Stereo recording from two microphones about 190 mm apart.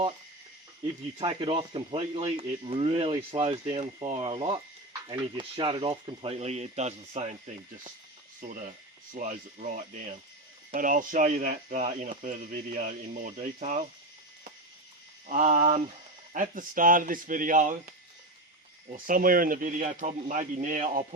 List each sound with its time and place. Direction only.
1.2 s speech: 30° right (ahead or behind)
9.1 s speech: 45° right (ahead or behind)
15.3 s speech: 35° right (ahead or behind)
16.3 s speech: 45° right (ahead or behind)
18.9 s speech: 45° right (ahead or behind)